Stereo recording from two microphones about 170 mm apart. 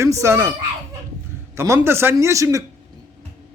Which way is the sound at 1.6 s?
15° right (ahead or behind).